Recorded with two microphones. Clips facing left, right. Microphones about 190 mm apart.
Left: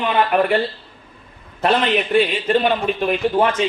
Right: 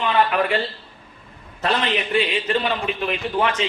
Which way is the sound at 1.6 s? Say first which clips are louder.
Left 5 dB; 55° left (ahead or behind).